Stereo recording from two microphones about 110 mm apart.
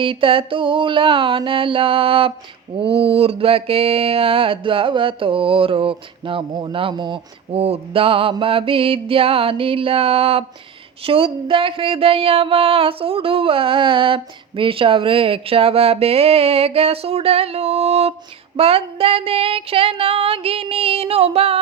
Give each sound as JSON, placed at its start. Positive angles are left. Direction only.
{"t": 0.0, "sound": "a sound", "side_deg": -50}
{"t": 2.7, "sound": "speech", "side_deg": -55}
{"t": 7.5, "sound": "speech", "side_deg": -60}
{"t": 18.5, "sound": "speech", "side_deg": -60}